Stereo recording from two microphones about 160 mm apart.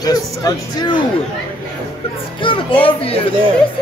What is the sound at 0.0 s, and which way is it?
Speech, 25° left (ahead or behind).